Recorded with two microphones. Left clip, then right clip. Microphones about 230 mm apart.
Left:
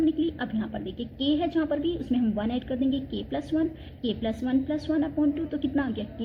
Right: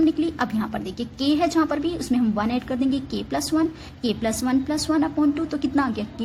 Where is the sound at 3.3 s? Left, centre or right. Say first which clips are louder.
Right 5 dB; right.